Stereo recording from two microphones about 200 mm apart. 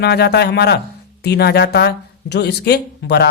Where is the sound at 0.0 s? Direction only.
55° left (ahead or behind).